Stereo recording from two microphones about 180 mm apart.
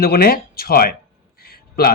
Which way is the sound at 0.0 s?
60° left (ahead or behind).